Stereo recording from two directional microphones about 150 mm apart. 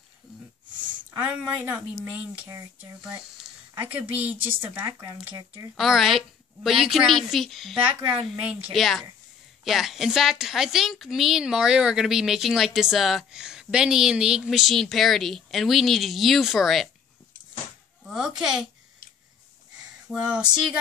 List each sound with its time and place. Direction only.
1.1 s a woman's voice: 10° right (ahead or behind)
3.0 s speech: 5° right (ahead or behind); by 5.7 s 25° right (ahead or behind)
5.8 s a woman's voice: centre (ahead or behind)
18.0 s a woman's voice: 5° right (ahead or behind)
20.1 s a woman's voice: 5° right (ahead or behind)